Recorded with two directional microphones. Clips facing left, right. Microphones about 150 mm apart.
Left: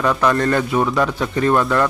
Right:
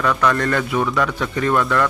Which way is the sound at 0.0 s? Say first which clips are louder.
Left 2 dB; 30° left (ahead or behind).